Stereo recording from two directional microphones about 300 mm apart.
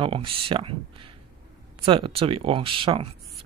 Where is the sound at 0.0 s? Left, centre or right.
Centre.